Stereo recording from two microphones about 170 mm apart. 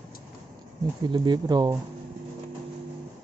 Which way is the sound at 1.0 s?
25° right (ahead or behind).